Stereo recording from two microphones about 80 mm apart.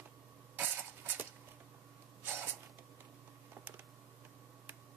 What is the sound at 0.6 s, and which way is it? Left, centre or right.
Dishes, right.